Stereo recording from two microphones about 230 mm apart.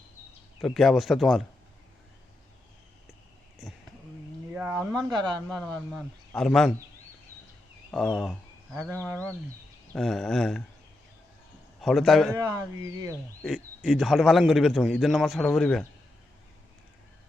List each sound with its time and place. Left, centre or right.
0.6 s speech: centre
4.5 s a sound: centre
5.0 s speech: centre
5.5 s speech: centre
7.9 s speech: centre
9.9 s speech: centre
11.8 s speech: centre
12.3 s speech: centre
13.4 s speech: centre